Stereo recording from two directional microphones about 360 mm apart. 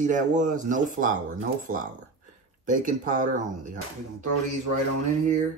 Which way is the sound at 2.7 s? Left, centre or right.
Right.